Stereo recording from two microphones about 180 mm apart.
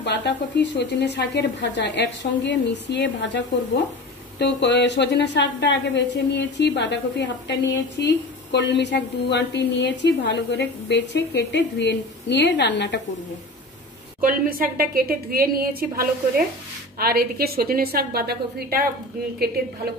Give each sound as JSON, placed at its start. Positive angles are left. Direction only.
{"t": 0.0, "sound": "a woman's voice", "side_deg": 75}
{"t": 4.4, "sound": "a woman's voice", "side_deg": 75}
{"t": 14.2, "sound": "a woman's voice", "side_deg": -50}